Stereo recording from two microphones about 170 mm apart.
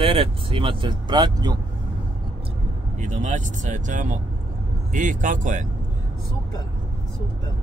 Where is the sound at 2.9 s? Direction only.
50° right (ahead or behind).